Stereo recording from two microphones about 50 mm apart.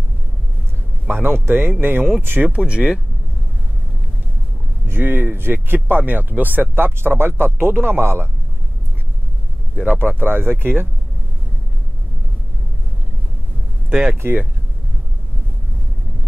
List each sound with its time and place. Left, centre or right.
1.0 s speech: right
2.4 s speech: right
4.8 s speech: right
9.9 s speech: right
13.8 s speech: right